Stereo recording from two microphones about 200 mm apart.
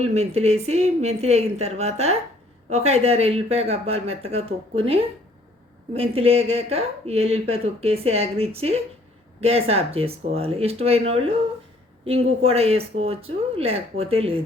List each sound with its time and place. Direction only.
0.0 s speech: 30° right (ahead or behind)